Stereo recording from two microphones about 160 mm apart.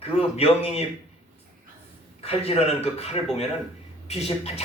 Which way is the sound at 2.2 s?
40° left (ahead or behind).